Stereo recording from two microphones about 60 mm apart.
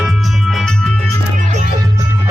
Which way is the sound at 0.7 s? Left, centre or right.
Centre.